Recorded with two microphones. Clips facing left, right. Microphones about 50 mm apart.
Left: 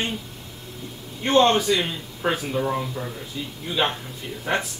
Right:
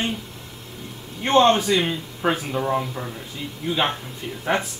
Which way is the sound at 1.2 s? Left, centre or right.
Right.